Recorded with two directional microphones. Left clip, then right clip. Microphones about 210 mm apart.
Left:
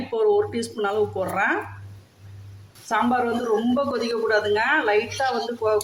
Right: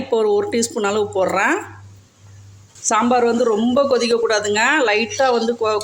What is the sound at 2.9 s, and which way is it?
Speech, 40° right (ahead or behind).